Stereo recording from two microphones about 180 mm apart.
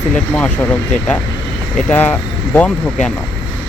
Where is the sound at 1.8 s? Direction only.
10° left (ahead or behind).